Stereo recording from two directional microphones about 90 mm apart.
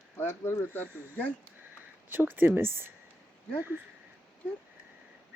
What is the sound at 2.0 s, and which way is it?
Speech, 25° right (ahead or behind).